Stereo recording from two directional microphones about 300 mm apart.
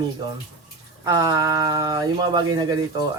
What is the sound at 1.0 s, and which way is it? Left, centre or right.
Speech, centre.